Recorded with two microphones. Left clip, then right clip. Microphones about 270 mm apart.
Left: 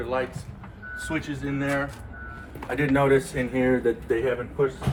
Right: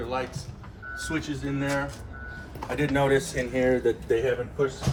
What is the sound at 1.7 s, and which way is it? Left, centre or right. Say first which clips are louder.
Speech: left 2 dB; centre.